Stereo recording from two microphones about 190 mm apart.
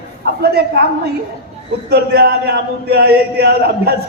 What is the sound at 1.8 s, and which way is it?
A man's voice, 55° right (ahead or behind).